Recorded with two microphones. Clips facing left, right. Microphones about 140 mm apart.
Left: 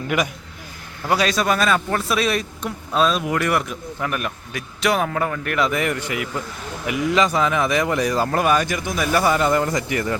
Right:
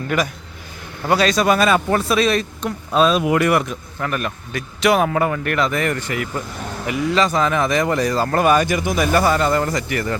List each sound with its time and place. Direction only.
0.1 s speech: 10° left (ahead or behind)
1.5 s speech: 5° right (ahead or behind)
2.1 s speech: 5° left (ahead or behind)
3.7 s speech: 10° left (ahead or behind)
4.9 s speech: 5° right (ahead or behind)
9.1 s speech: 10° left (ahead or behind)